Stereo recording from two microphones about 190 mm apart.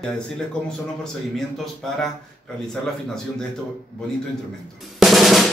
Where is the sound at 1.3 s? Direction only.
Centre (ahead or behind).